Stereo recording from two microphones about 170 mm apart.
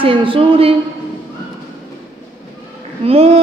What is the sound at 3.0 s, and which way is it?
Speech, 35° right (ahead or behind).